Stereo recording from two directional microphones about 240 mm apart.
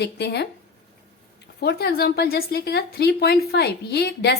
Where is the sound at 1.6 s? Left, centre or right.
Left.